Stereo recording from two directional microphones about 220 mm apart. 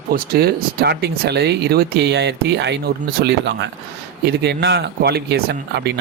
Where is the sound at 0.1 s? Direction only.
40° right (ahead or behind).